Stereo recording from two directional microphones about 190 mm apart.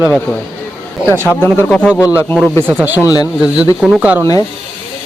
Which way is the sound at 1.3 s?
10° left (ahead or behind).